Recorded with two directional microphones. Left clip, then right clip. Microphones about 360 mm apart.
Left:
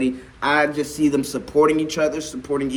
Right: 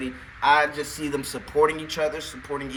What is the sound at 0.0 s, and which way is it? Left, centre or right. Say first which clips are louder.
Speech: left 1 dB; centre.